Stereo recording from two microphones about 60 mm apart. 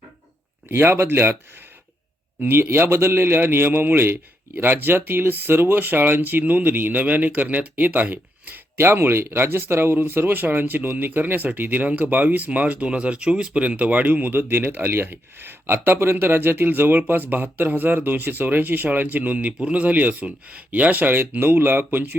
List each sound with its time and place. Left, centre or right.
0.7 s speech: right
2.4 s a man's voice: right